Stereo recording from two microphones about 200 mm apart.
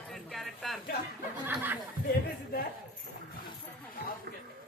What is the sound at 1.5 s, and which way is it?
Snicker, 10° right (ahead or behind).